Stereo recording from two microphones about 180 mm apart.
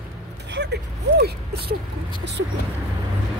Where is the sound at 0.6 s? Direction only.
70° right (ahead or behind).